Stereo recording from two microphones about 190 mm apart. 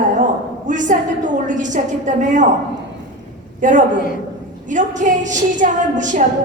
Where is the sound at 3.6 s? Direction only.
40° right (ahead or behind).